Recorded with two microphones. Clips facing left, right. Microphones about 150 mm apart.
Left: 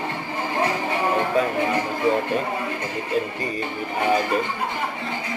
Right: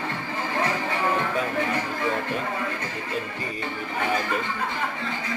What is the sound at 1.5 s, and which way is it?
A woman's voice, 15° left (ahead or behind).